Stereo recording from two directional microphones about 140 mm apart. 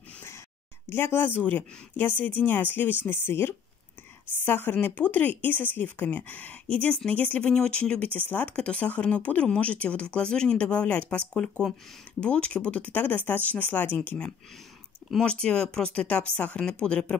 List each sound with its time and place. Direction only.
0.8 s speech: 15° left (ahead or behind)